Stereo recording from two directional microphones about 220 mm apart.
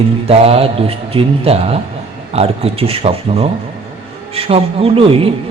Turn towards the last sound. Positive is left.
turn(degrees=-25)  # may be behind; listen again after turning